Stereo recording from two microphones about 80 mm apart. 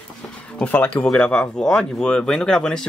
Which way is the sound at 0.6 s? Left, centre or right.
Centre.